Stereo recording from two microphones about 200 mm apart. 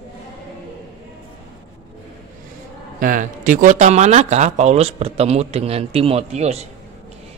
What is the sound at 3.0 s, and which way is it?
Speech, 40° right (ahead or behind).